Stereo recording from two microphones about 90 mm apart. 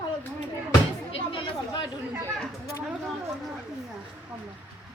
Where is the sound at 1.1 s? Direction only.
65° left (ahead or behind).